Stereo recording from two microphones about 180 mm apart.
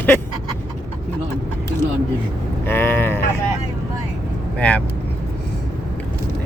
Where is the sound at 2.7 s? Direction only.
10° left (ahead or behind).